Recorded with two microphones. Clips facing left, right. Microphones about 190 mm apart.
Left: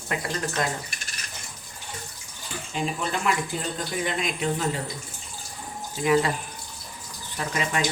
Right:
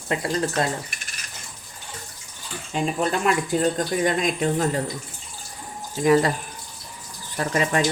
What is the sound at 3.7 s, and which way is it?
Speech, 45° right (ahead or behind).